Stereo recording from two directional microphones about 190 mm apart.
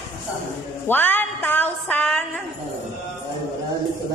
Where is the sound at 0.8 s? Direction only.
10° left (ahead or behind).